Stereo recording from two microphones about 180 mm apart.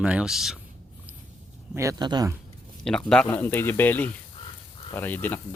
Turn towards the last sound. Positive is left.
turn(degrees=10)  # may be behind; listen again after turning